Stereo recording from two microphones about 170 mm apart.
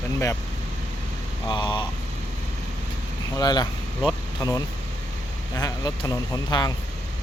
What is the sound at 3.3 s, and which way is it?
Speech, 25° left (ahead or behind).